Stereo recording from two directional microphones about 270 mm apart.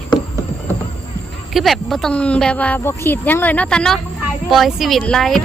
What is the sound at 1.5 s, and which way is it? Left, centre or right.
Speech, centre.